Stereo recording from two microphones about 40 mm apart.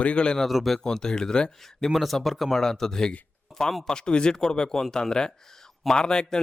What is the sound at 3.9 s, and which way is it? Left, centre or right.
A man's voice, centre.